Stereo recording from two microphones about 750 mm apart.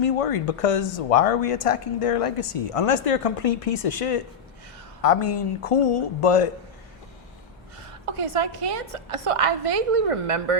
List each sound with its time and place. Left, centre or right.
0.0 s speech: left
8.1 s a woman's voice: right